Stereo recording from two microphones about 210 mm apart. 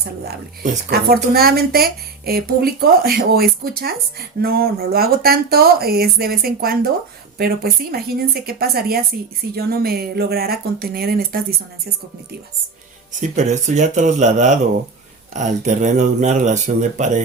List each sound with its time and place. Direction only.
0.3 s speech: 45° right (ahead or behind)
13.2 s speech: 35° right (ahead or behind)